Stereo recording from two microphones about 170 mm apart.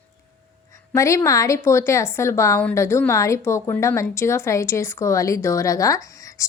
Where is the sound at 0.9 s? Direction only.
20° left (ahead or behind).